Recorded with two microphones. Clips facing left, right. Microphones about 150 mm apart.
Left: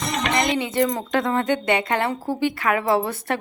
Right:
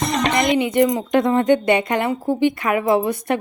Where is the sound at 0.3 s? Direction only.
20° right (ahead or behind).